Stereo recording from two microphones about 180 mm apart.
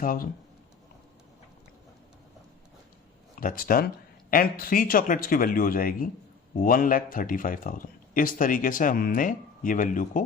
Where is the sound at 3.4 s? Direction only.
50° left (ahead or behind).